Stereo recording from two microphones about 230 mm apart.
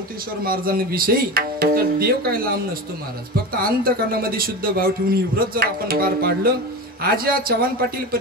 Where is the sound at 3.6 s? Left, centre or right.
Right.